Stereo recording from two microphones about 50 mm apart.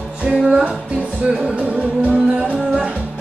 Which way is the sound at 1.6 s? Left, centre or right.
Right.